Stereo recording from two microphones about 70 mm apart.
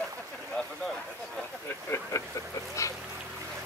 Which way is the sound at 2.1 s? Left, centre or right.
Left.